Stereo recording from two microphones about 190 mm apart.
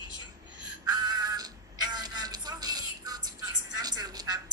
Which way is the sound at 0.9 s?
20° right (ahead or behind).